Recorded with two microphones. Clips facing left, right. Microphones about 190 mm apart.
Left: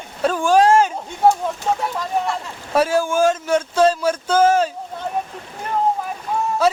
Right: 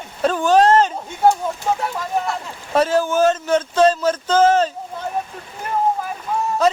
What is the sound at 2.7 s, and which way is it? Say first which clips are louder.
Speech: right 1 dB; 10° left (ahead or behind).